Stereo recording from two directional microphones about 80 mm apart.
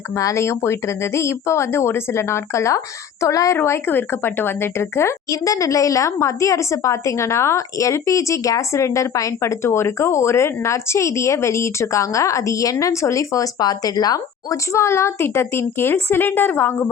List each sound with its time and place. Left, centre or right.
0.1 s a woman's voice: left
3.6 s a woman's voice: left
5.3 s a woman's voice: left